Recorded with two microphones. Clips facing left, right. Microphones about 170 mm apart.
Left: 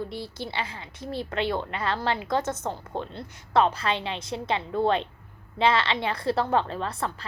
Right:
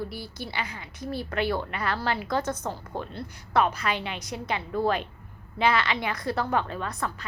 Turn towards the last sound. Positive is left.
turn(degrees=30)  # may be behind; listen again after turning